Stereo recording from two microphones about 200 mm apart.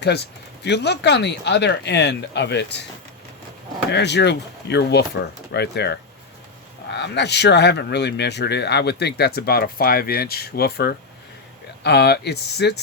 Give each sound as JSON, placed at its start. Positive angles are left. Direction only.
{"t": 0.0, "sound": "speech", "side_deg": 55}
{"t": 3.9, "sound": "speech", "side_deg": 60}